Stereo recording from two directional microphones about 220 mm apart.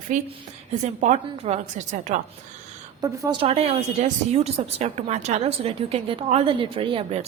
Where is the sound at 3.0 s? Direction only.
15° right (ahead or behind).